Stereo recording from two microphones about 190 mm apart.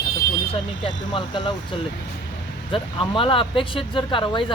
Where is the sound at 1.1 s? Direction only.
25° left (ahead or behind).